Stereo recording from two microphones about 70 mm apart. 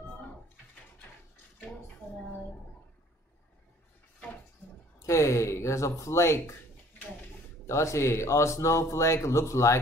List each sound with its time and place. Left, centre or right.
5.0 s speech: left
7.6 s speech: left